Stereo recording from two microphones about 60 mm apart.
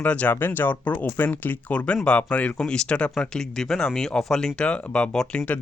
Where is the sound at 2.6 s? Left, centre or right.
Centre.